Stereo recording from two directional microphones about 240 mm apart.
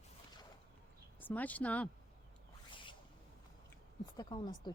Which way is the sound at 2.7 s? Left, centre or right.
Left.